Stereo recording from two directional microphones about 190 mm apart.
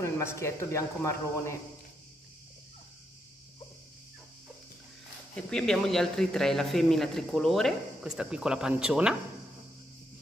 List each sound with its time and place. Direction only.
0.0 s speech: 15° left (ahead or behind)
5.3 s speech: 5° left (ahead or behind)